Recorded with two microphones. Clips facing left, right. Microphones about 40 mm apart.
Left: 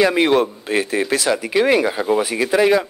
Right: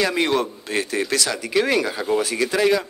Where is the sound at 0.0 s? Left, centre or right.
Centre.